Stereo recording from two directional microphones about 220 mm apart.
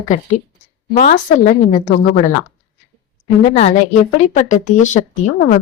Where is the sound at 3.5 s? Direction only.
30° left (ahead or behind).